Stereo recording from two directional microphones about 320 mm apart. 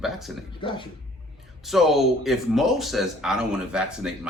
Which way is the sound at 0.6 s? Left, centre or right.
Centre.